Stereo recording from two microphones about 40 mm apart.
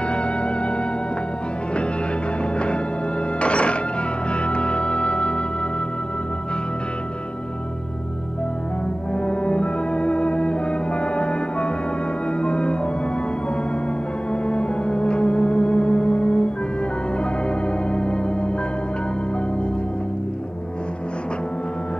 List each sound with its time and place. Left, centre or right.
0.1 s music: left
3.3 s music: left
9.1 s music: left
14.3 s music: left
17.8 s organ: left